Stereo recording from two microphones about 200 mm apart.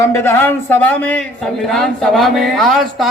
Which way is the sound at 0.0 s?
15° left (ahead or behind).